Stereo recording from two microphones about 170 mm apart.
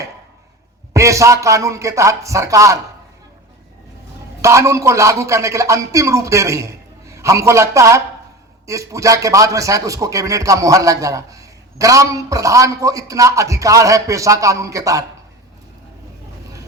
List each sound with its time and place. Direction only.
0.9 s speech: 20° right (ahead or behind)
4.4 s a man's voice: 15° right (ahead or behind)